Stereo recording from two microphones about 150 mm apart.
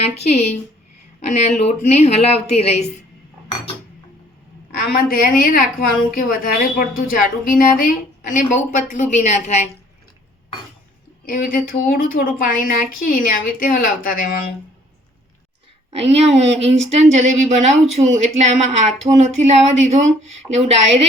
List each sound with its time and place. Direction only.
0.3 s speech: 45° left (ahead or behind)
5.0 s a woman's voice: 75° left (ahead or behind)
8.4 s speech: 55° left (ahead or behind)
11.3 s a woman's voice: 65° left (ahead or behind)
15.9 s speech: 45° right (ahead or behind)